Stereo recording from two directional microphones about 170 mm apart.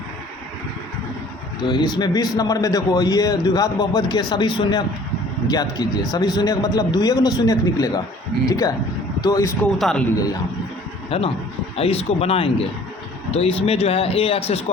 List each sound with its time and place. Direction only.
1.6 s a man's voice: 25° left (ahead or behind)
9.7 s speech: 5° left (ahead or behind)
11.1 s speech: 30° left (ahead or behind)